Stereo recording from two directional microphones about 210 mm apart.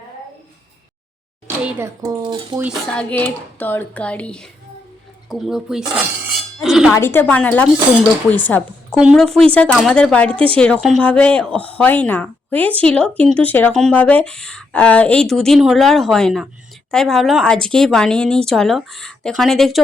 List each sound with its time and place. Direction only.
1.5 s a child's voice: 10° right (ahead or behind)
2.9 s speech: 5° left (ahead or behind)
5.3 s a sound: centre (ahead or behind)
6.9 s speech: 10° left (ahead or behind)